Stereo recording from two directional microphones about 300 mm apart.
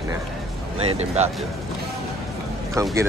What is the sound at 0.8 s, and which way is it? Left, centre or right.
Speech, right.